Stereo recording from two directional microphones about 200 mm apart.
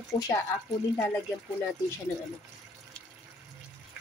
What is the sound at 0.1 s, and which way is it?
Speech, 25° left (ahead or behind).